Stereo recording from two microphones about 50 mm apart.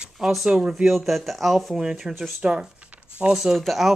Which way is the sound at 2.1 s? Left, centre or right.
Centre.